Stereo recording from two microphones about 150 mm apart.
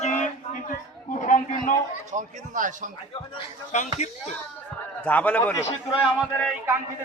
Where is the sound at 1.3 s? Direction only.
60° left (ahead or behind).